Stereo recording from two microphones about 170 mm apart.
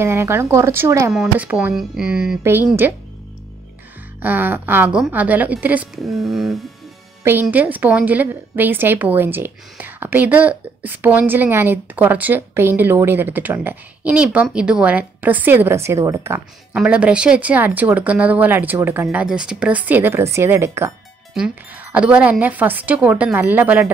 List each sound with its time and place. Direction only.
0.0 s a woman's voice: 15° right (ahead or behind)
4.2 s a woman's voice: 10° right (ahead or behind)